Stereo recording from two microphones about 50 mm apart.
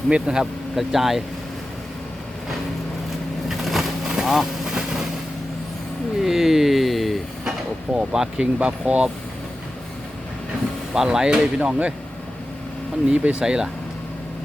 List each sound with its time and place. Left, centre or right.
0.1 s speech: centre
0.8 s speech: centre
3.5 s a sound: centre
4.0 s vehicle: centre
6.1 s speech: centre
7.9 s speech: centre
8.5 s speech: right
10.9 s speech: centre
13.1 s speech: right